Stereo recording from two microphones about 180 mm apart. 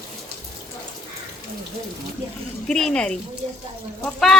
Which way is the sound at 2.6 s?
5° left (ahead or behind).